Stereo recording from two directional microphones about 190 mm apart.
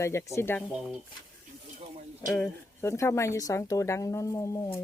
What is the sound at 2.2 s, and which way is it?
Speech, 10° left (ahead or behind).